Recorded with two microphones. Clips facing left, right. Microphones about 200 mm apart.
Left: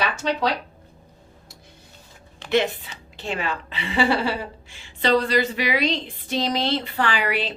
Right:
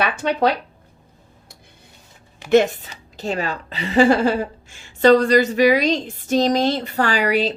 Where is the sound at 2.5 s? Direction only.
45° right (ahead or behind).